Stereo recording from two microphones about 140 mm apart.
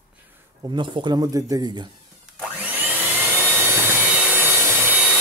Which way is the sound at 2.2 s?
5° right (ahead or behind).